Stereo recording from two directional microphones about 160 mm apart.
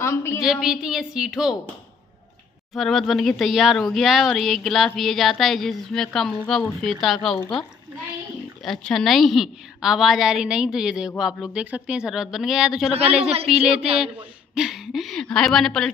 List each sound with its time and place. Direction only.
0.0 s a woman's voice: 15° left (ahead or behind)
0.4 s speech: 5° right (ahead or behind)
2.7 s speech: centre (ahead or behind)
8.6 s speech: centre (ahead or behind)